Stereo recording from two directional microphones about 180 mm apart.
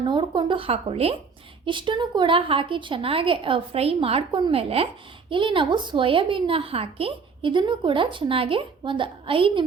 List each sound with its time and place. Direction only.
0.0 s a woman's voice: 25° right (ahead or behind)